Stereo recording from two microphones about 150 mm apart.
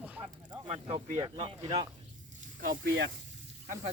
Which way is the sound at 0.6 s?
45° right (ahead or behind).